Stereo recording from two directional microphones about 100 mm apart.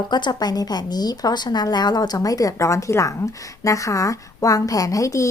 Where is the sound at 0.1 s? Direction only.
45° left (ahead or behind).